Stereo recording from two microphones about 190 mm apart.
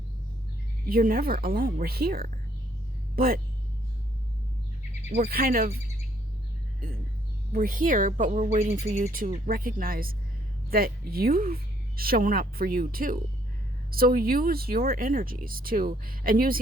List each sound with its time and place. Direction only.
0.9 s speech: 50° right (ahead or behind)
5.1 s speech: 50° right (ahead or behind)
7.5 s speech: 50° right (ahead or behind)